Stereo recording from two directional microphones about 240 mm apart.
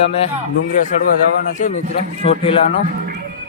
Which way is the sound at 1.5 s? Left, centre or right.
Left.